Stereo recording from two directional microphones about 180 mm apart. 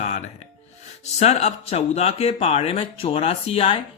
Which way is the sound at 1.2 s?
35° left (ahead or behind).